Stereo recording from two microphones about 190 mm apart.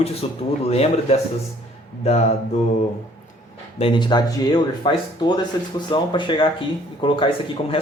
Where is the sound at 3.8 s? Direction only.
25° left (ahead or behind).